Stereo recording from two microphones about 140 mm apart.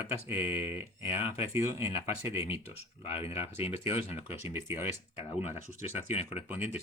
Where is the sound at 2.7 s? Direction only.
45° left (ahead or behind).